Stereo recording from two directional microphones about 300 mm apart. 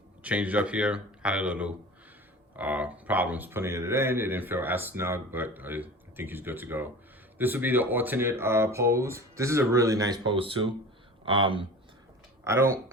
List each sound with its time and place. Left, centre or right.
0.2 s speech: centre